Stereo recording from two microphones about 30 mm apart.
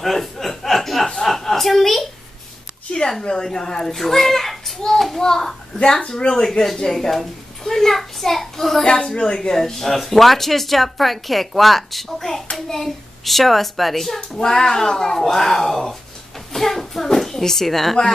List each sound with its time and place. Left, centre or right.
0.0 s a sound: centre
3.0 s a woman's voice: left
3.4 s a child's voice: centre
6.0 s speech: left
6.4 s a child's voice: centre
9.1 s speech: left; by 14.2 s centre
14.3 s speech: left